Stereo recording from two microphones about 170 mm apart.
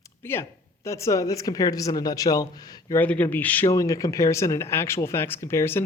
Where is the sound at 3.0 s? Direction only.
10° left (ahead or behind).